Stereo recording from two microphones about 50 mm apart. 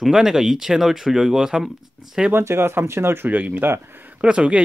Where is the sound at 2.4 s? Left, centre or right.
Right.